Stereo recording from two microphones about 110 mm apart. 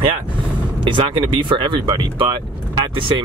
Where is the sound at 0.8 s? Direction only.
50° right (ahead or behind).